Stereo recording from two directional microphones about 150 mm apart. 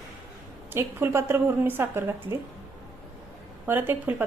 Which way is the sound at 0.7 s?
15° right (ahead or behind).